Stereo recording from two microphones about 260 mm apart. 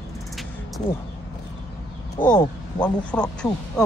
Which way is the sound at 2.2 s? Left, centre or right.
Left.